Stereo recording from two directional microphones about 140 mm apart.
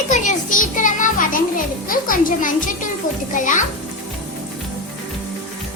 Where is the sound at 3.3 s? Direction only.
65° left (ahead or behind).